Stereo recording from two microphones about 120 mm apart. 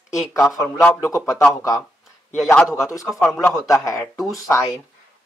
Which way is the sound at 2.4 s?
10° left (ahead or behind).